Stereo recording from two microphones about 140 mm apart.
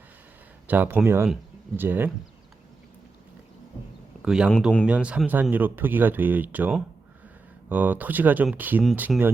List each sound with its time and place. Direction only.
0.7 s speech: 10° right (ahead or behind)
4.2 s speech: 5° right (ahead or behind)